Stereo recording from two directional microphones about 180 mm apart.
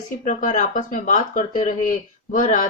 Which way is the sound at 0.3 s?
45° left (ahead or behind).